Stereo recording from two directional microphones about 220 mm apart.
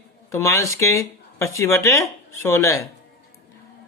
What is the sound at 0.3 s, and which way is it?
Speech, 15° left (ahead or behind).